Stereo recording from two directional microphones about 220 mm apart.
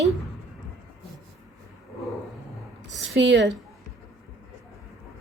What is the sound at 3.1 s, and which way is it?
Speech, 55° right (ahead or behind).